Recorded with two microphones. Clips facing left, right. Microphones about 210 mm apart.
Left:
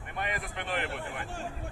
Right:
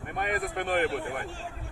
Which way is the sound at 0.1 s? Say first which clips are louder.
Right 6 dB; 50° right (ahead or behind).